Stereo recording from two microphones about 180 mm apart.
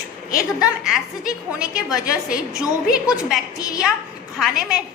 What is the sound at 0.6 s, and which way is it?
A woman's voice, centre (ahead or behind).